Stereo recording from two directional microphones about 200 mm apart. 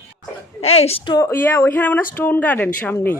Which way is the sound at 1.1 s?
10° left (ahead or behind).